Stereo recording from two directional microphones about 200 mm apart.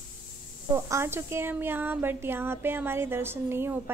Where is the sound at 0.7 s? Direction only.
10° right (ahead or behind).